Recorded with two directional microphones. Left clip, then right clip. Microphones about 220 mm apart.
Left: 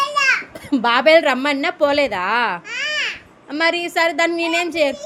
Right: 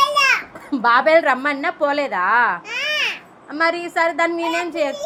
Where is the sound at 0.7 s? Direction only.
30° left (ahead or behind).